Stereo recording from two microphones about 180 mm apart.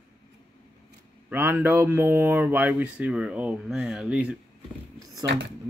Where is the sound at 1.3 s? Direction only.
10° right (ahead or behind).